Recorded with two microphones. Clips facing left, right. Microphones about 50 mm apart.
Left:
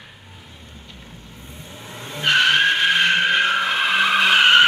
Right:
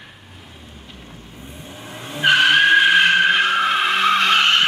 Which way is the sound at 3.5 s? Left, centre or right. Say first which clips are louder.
Right 2 dB; centre.